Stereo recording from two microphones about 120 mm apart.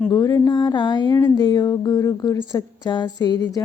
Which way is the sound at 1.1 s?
20° left (ahead or behind).